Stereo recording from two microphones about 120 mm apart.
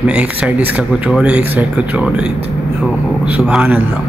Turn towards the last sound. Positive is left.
turn(degrees=-10)  # may be behind; listen again after turning